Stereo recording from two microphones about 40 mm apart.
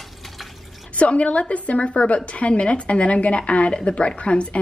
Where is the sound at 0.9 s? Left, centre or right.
Left.